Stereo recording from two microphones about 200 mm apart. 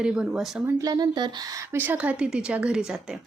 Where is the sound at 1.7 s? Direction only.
10° right (ahead or behind).